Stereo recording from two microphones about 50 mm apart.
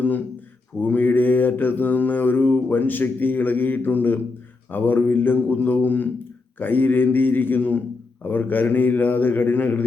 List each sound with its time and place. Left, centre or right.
0.8 s mantra: left
4.7 s a man's voice: left